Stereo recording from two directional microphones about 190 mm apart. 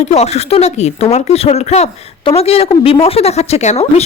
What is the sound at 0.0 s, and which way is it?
A woman's voice, 35° left (ahead or behind).